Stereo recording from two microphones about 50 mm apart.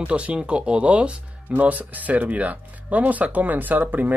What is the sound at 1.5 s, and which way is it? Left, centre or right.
Speech, right.